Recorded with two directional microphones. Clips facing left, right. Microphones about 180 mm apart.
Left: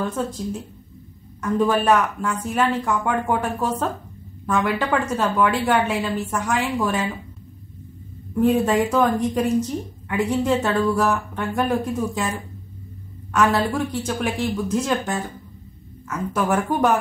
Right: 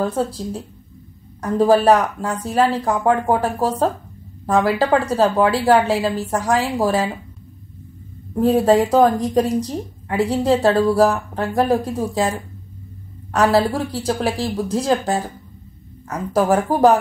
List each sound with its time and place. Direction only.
0.0 s speech: 35° right (ahead or behind)
8.4 s speech: 35° right (ahead or behind)